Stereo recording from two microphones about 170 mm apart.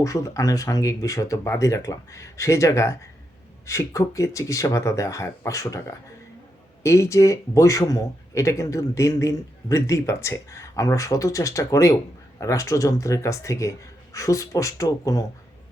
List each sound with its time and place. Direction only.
0.0 s a man's voice: 20° left (ahead or behind)